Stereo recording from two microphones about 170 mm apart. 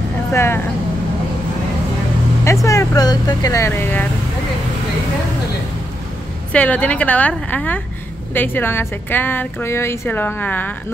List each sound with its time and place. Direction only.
0.3 s speech: 15° left (ahead or behind)
2.6 s speech: 20° left (ahead or behind)
6.5 s a woman's voice: 10° left (ahead or behind)